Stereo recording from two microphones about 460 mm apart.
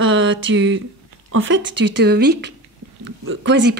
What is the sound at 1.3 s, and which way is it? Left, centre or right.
Speech, right.